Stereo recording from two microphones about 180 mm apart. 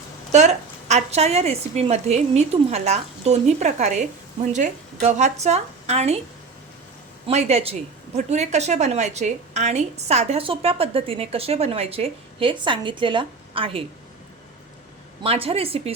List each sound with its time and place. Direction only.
0.3 s speech: 40° right (ahead or behind)
7.3 s speech: 35° right (ahead or behind)
15.2 s speech: 30° right (ahead or behind)